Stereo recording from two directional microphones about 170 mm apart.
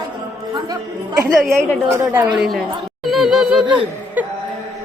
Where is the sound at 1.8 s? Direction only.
15° right (ahead or behind).